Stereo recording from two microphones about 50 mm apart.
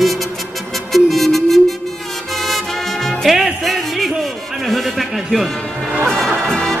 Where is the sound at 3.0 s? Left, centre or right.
Centre.